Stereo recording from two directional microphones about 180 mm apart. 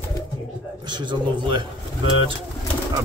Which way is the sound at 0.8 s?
25° right (ahead or behind).